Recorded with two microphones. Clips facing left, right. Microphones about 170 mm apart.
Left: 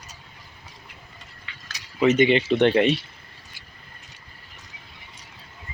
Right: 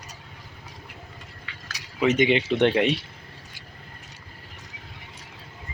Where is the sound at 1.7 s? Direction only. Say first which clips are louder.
Left 3 dB; 10° right (ahead or behind).